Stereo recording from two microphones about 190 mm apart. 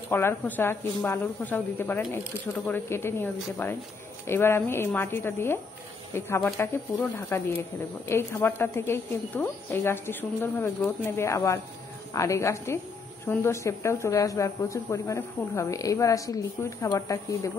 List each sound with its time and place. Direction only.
0.1 s a woman's voice: 10° left (ahead or behind)